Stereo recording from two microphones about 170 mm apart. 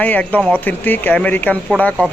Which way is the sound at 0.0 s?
10° left (ahead or behind).